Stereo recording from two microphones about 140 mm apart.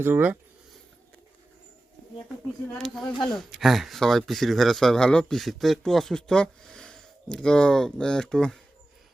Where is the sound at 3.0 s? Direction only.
35° left (ahead or behind).